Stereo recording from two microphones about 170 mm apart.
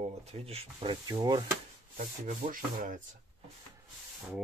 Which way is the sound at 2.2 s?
50° right (ahead or behind).